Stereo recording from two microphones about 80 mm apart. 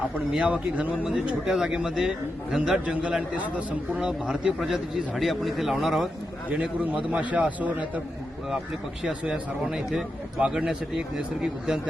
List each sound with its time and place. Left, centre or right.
0.4 s speech: centre
4.3 s a man's voice: centre
6.5 s speech: centre
9.0 s speech: centre